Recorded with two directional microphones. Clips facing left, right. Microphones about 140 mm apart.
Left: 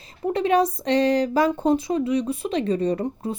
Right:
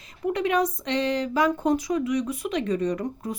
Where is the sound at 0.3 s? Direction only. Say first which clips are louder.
Left 3 dB; 30° left (ahead or behind).